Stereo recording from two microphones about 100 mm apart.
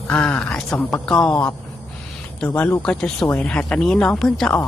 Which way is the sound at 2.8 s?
10° left (ahead or behind).